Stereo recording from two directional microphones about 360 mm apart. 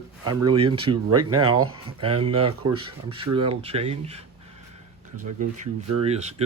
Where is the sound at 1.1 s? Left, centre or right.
Right.